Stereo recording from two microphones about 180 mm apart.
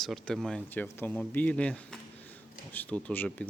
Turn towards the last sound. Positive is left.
turn(degrees=10)  # may be behind; listen again after turning